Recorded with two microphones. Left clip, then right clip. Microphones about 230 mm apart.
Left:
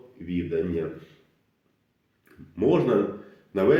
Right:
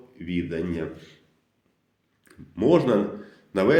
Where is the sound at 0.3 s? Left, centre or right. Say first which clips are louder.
Left 1 dB; right.